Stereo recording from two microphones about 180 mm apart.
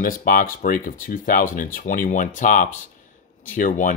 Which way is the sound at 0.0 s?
50° left (ahead or behind).